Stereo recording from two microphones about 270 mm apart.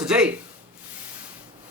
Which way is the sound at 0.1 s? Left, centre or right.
Centre.